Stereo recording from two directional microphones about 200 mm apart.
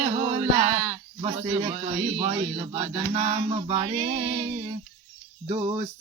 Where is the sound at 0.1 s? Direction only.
20° right (ahead or behind).